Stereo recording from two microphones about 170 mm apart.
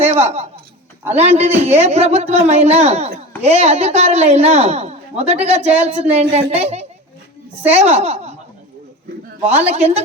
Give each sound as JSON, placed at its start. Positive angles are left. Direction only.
{"t": 0.0, "sound": "a woman's voice", "side_deg": -40}
{"t": 9.5, "sound": "a woman's voice", "side_deg": -40}